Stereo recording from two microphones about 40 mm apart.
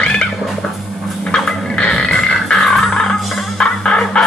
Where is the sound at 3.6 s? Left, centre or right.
Left.